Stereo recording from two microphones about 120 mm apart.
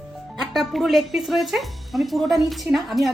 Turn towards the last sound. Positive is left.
turn(degrees=0)  # may be behind; listen again after turning